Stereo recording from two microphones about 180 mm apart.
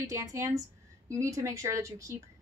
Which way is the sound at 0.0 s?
15° right (ahead or behind).